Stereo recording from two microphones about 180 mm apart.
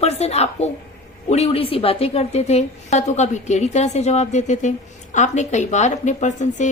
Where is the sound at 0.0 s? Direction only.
35° left (ahead or behind).